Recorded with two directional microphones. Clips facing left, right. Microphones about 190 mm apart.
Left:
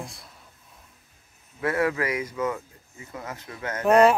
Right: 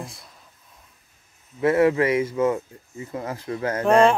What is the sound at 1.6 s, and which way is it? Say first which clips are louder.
Speech: right 7 dB; 25° right (ahead or behind).